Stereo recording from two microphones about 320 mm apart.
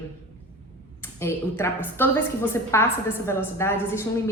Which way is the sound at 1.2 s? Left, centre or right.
Centre.